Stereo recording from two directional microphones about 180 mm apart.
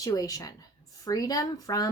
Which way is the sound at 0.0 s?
20° left (ahead or behind).